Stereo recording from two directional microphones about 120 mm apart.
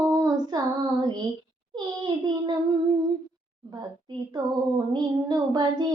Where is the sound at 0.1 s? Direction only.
30° right (ahead or behind).